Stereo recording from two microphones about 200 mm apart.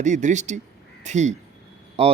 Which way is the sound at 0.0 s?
35° right (ahead or behind).